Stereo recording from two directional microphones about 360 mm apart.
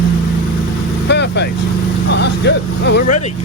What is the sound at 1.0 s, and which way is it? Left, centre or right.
Vehicle, left.